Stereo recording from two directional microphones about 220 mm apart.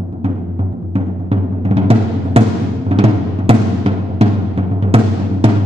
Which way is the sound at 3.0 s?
25° right (ahead or behind).